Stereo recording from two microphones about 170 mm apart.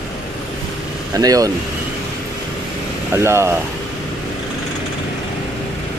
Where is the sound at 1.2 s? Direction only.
20° right (ahead or behind).